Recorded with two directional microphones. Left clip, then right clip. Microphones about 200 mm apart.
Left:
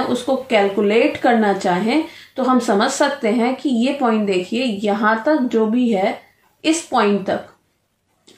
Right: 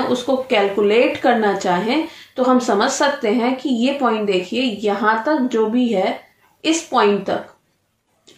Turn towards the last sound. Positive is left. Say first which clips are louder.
# right 1 dB
turn(degrees=50)  # may be behind; listen again after turning